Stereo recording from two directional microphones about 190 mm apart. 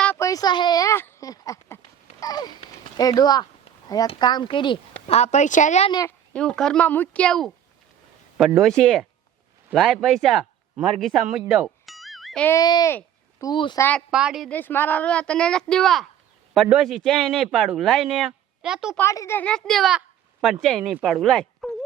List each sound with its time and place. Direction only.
0.0 s a sound: 10° left (ahead or behind)
3.0 s speech: 20° left (ahead or behind); by 5.9 s 40° left (ahead or behind)
6.1 s a man's voice: 5° left (ahead or behind)
12.5 s speech: 20° left (ahead or behind)
14.1 s a man's voice: 5° right (ahead or behind)
14.5 s a man's voice: 10° left (ahead or behind)
18.9 s a woman's voice: 15° left (ahead or behind)